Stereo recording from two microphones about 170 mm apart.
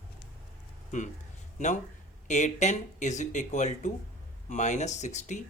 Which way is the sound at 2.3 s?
45° left (ahead or behind).